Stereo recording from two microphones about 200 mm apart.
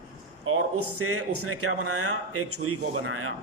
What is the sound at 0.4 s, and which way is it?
Speech, 90° right.